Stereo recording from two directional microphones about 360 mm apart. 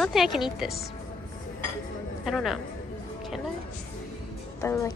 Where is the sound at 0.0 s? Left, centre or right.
Centre.